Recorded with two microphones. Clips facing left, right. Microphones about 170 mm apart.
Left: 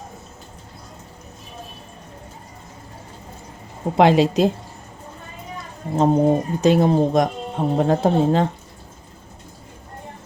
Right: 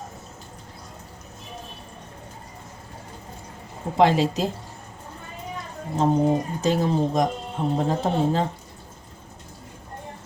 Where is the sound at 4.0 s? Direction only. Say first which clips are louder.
Left 4 dB; 70° left (ahead or behind).